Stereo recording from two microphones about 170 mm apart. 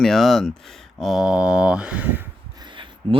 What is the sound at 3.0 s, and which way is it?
Speech, 30° right (ahead or behind).